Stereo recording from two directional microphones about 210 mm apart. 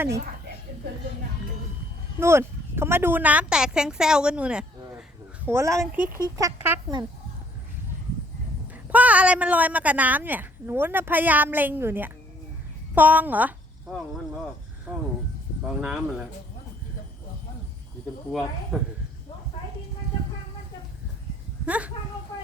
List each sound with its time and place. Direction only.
2.1 s a woman's voice: 10° right (ahead or behind)
8.7 s a woman's voice: 5° right (ahead or behind)
14.9 s speech: 5° right (ahead or behind)
18.3 s speech: centre (ahead or behind)
21.7 s a woman's voice: 5° right (ahead or behind)